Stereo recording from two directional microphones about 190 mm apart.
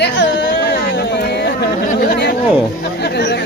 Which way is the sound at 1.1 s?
60° left (ahead or behind).